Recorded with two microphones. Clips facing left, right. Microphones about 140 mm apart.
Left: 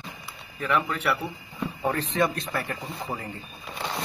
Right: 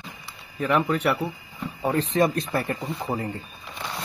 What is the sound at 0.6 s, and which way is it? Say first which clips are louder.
Speech: right 4 dB; 35° right (ahead or behind).